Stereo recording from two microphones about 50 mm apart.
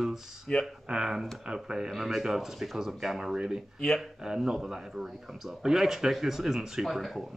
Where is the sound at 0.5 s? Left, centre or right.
Centre.